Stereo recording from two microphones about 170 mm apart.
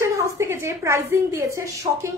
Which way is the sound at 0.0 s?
15° right (ahead or behind).